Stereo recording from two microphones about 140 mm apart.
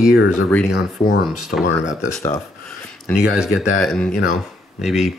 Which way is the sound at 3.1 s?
5° right (ahead or behind).